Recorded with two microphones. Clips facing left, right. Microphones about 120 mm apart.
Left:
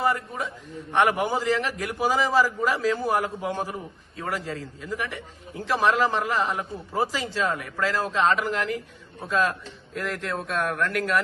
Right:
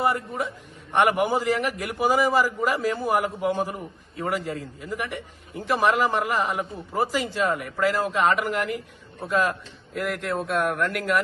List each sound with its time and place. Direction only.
0.0 s a man's voice: 15° right (ahead or behind)